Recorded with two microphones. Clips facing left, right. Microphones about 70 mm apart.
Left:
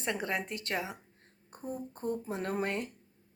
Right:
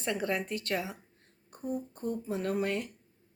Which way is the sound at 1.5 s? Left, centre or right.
Left.